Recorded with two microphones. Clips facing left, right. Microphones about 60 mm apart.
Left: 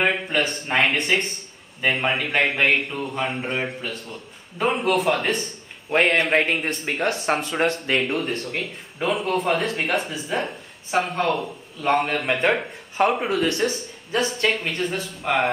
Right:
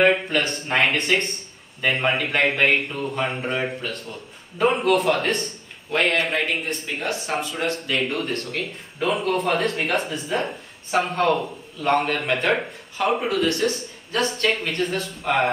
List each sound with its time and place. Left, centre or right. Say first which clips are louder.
0.0 s speech: right 3 dB; centre
5.9 s a man's voice: left 2 dB; left
6.8 s speech: left 3 dB; left
7.6 s speech: left 5 dB; left
8.0 s speech: left 1 dB; centre
8.3 s speech: even; centre
9.0 s speech: even; centre